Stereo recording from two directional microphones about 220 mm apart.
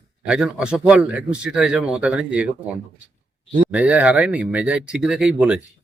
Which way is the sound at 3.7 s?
5° right (ahead or behind).